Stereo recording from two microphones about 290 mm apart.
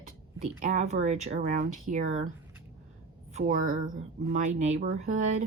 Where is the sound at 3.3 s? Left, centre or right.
Right.